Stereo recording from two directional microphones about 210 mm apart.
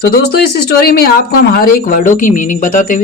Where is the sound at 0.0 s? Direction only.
50° left (ahead or behind).